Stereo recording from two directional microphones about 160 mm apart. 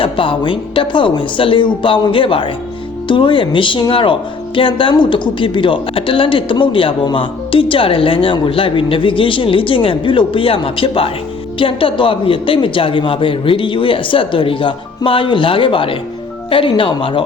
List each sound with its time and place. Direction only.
0.0 s speech: 30° left (ahead or behind)